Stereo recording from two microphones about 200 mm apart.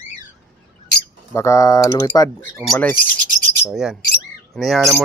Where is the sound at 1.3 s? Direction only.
15° left (ahead or behind).